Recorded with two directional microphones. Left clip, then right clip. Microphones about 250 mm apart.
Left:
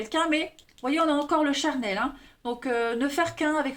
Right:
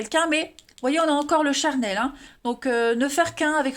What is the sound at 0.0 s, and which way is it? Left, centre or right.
Speech, right.